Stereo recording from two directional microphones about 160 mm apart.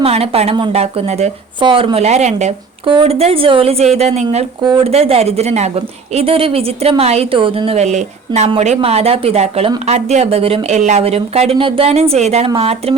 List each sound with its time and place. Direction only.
0.0 s speech: 40° right (ahead or behind)
2.8 s speech: 35° right (ahead or behind)
4.6 s speech: 30° right (ahead or behind)
4.9 s speech: 40° right (ahead or behind)